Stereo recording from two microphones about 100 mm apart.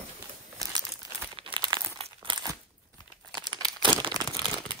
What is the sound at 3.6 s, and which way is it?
Crumpling, 50° right (ahead or behind).